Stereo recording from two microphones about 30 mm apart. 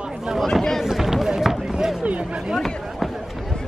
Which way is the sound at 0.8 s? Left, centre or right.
Centre.